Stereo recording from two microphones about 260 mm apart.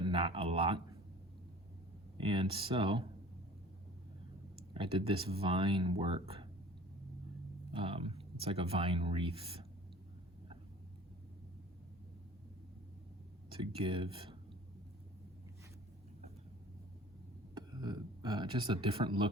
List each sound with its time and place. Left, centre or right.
0.0 s speech: centre
2.1 s speech: centre
4.7 s speech: centre
7.7 s speech: right
13.5 s speech: right
17.5 s speech: centre